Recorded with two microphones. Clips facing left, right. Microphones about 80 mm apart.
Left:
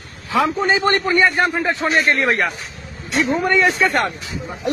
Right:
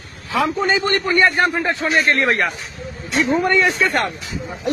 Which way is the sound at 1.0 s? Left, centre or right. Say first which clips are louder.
Even; centre.